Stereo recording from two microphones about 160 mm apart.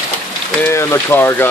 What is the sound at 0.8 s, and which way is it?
Speech, 15° left (ahead or behind).